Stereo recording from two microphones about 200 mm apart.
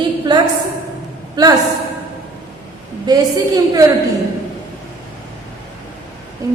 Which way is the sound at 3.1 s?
20° right (ahead or behind).